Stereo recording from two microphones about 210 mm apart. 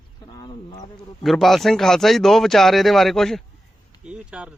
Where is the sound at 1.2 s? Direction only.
Centre (ahead or behind).